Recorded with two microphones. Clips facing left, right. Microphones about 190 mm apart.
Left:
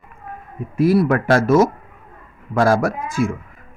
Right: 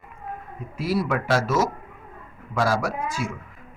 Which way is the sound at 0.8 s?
55° left (ahead or behind).